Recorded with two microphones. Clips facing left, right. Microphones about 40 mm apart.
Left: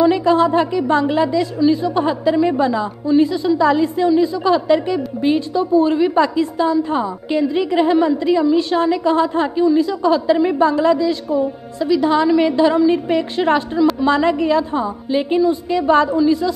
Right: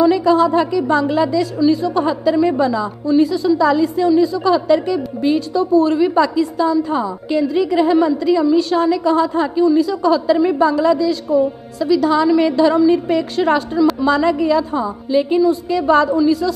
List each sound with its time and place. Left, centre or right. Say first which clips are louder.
0.0 s a woman's voice: right 1 dB; left
2.0 s a woman's voice: right 1 dB; left
2.3 s a woman's voice: right 1 dB; centre
2.6 s a woman's voice: even; left